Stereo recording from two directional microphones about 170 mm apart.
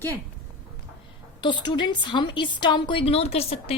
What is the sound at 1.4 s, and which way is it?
A woman's voice, 25° left (ahead or behind).